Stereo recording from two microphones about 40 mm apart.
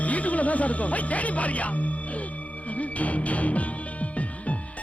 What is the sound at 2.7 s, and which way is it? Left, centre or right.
Music, left.